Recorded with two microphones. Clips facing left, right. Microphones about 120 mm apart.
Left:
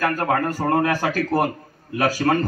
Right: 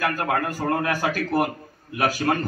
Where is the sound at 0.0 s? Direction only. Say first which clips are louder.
Left 3 dB; 35° left (ahead or behind).